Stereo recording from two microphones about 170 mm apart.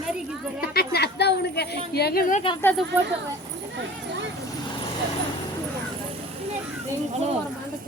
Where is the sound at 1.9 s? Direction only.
65° left (ahead or behind).